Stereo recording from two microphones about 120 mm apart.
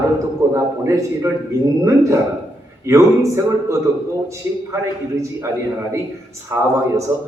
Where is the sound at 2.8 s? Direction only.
25° right (ahead or behind).